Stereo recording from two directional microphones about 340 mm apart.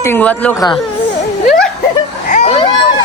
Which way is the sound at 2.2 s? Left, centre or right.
Left.